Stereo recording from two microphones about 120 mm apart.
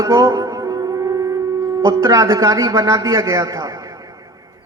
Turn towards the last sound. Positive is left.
turn(degrees=-30)  # may be behind; listen again after turning